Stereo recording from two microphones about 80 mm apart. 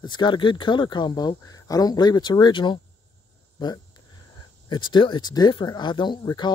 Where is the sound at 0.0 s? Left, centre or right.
Left.